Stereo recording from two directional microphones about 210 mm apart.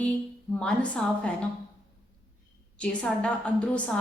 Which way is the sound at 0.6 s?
5° left (ahead or behind).